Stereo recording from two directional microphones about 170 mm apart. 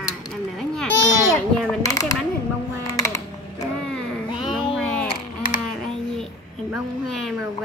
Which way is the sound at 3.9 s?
Centre (ahead or behind).